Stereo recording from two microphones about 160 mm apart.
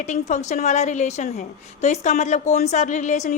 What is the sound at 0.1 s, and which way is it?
A woman's voice, 50° left (ahead or behind).